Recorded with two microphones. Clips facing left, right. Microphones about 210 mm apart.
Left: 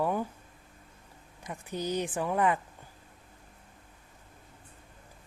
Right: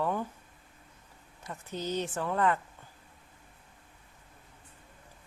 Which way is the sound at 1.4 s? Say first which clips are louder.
Left 2 dB; 15° left (ahead or behind).